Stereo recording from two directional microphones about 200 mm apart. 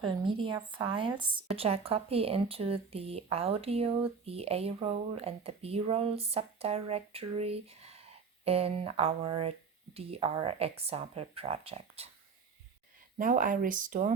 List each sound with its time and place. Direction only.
0.0 s speech: 25° right (ahead or behind)
13.1 s speech: 40° right (ahead or behind)